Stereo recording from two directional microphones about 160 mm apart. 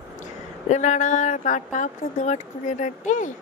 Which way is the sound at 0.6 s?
50° left (ahead or behind).